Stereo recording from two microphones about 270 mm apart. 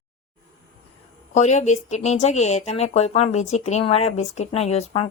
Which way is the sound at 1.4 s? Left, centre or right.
Left.